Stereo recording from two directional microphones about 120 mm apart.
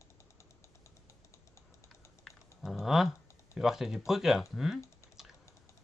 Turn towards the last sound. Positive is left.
turn(degrees=0)  # may be behind; listen again after turning